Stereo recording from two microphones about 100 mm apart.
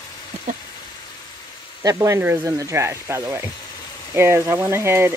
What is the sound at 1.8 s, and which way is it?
Speech, 30° right (ahead or behind).